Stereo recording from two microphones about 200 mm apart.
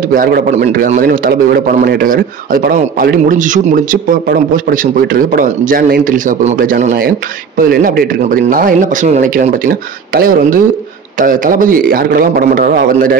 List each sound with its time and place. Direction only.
0.1 s a man's voice: 45° right (ahead or behind)